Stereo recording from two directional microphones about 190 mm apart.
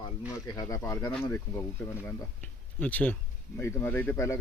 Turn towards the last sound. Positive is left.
turn(degrees=15)  # may be behind; listen again after turning